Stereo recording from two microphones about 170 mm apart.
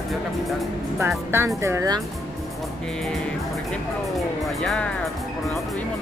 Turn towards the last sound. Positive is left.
turn(degrees=0)  # may be behind; listen again after turning